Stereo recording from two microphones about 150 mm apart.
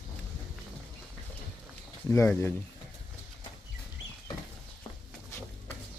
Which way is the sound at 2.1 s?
15° left (ahead or behind).